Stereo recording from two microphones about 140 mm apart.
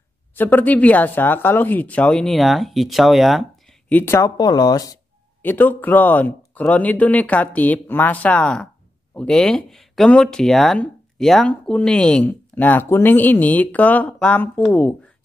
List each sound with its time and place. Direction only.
0.4 s speech: 10° left (ahead or behind)
3.9 s speech: 15° left (ahead or behind)
5.4 s speech: 15° left (ahead or behind)